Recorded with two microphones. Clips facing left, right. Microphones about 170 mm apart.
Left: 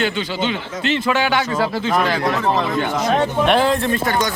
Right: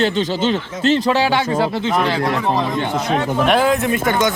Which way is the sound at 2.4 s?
15° right (ahead or behind).